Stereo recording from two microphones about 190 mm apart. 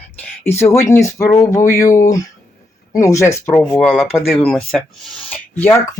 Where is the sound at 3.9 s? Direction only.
5° right (ahead or behind).